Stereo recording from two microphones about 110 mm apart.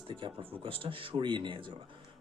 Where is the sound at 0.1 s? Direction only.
50° right (ahead or behind).